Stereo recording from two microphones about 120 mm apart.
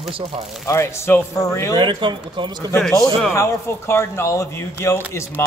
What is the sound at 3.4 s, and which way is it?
Speech, 20° left (ahead or behind).